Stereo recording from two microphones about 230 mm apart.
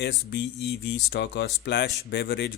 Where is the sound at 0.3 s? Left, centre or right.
Left.